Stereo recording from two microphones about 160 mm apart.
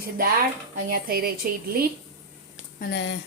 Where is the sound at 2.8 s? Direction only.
90° left.